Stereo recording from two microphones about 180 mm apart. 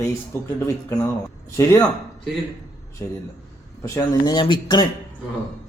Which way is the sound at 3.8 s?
20° left (ahead or behind).